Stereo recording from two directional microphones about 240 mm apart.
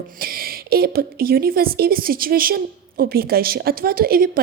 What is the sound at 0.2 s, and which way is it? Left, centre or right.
A woman's voice, right.